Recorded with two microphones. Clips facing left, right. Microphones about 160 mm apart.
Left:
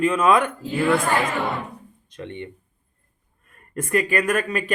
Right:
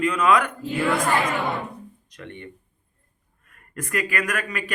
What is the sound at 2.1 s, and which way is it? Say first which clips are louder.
Speech: left 6 dB; 20° left (ahead or behind).